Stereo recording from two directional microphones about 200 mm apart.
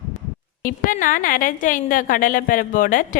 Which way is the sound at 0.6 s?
40° left (ahead or behind).